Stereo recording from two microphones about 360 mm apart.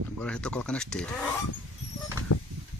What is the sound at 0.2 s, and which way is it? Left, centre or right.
Speech, centre.